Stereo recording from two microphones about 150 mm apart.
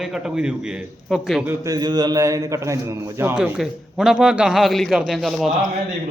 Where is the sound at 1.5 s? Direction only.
25° right (ahead or behind); by 5.5 s centre (ahead or behind).